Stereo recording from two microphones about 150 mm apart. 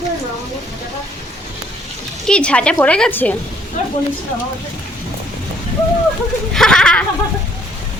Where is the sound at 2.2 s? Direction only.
5° left (ahead or behind).